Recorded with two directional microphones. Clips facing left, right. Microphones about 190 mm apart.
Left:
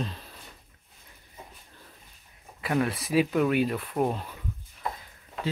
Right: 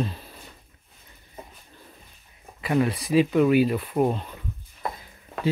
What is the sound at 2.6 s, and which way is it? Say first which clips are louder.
Speech: right 4 dB; centre (ahead or behind).